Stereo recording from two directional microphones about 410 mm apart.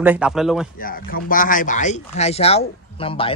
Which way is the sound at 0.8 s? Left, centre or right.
Centre.